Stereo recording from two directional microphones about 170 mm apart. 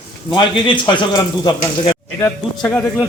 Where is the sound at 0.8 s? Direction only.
25° left (ahead or behind).